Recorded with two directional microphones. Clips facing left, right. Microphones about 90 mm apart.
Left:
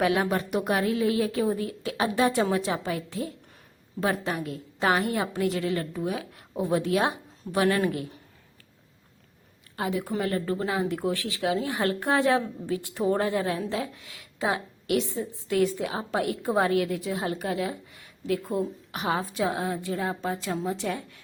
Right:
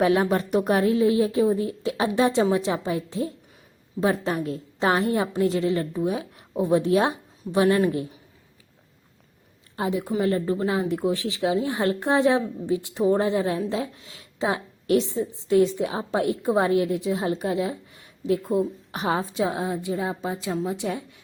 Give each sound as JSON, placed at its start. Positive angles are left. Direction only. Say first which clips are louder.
{"t": 0.0, "sound": "a woman's voice", "louder": "right 4 dB", "side_deg": -30}
{"t": 9.7, "sound": "a woman's voice", "louder": "right 3 dB", "side_deg": -20}